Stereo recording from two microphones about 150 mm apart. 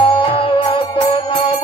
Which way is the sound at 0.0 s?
35° left (ahead or behind).